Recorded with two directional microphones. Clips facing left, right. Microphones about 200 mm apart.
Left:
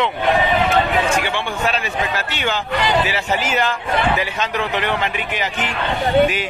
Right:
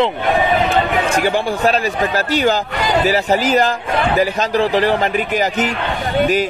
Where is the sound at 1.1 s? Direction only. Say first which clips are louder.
Right 5 dB; 40° right (ahead or behind).